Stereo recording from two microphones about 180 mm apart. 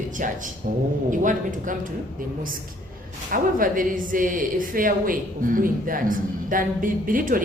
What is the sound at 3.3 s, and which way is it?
Speech, 50° right (ahead or behind).